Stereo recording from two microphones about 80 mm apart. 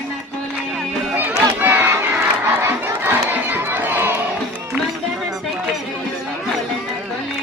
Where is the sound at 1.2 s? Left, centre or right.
Right.